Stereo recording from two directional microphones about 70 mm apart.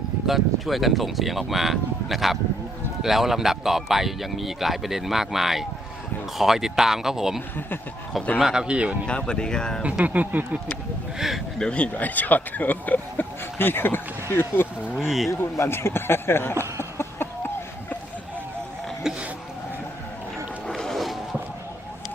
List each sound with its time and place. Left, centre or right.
0.3 s speech: centre
9.0 s speech: centre
10.0 s speech: right
11.6 s speech: centre; by 16.6 s left
19.1 s a sound: centre
20.7 s music: centre